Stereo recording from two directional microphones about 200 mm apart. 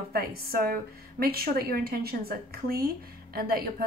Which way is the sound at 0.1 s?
50° right (ahead or behind).